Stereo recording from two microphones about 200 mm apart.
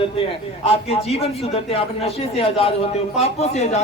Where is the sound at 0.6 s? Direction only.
30° left (ahead or behind).